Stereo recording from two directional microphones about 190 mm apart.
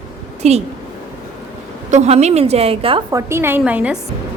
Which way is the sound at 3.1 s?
15° right (ahead or behind).